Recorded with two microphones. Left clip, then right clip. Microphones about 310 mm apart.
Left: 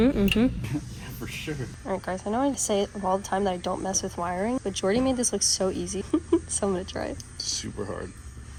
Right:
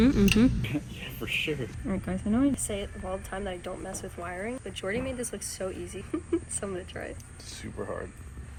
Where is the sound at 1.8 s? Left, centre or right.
Right.